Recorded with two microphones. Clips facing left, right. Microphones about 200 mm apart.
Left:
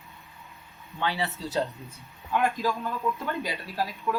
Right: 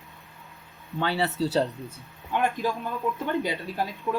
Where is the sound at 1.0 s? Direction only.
40° right (ahead or behind).